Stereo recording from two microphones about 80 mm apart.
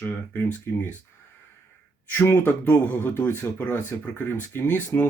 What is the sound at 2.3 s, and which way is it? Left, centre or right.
Speech, left.